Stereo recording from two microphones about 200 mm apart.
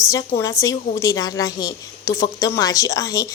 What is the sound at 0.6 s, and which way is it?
A woman's voice, 15° left (ahead or behind).